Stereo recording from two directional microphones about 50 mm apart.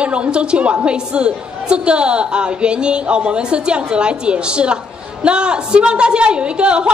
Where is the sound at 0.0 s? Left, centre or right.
Right.